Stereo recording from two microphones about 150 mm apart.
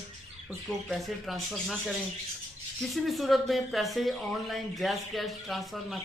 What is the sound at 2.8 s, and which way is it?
Speech, centre (ahead or behind).